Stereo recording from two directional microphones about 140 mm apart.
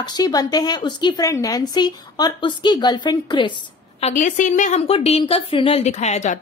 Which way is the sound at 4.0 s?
65° left (ahead or behind).